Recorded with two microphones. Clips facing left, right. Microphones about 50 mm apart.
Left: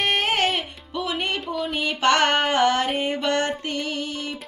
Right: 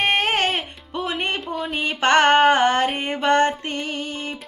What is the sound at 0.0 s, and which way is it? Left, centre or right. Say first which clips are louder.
Music: right 2 dB; right.